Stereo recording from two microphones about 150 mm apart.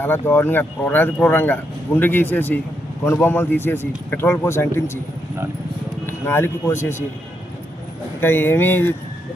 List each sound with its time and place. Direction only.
0.0 s speech: 15° left (ahead or behind)
6.1 s a man's voice: 15° left (ahead or behind)
8.2 s speech: 15° left (ahead or behind)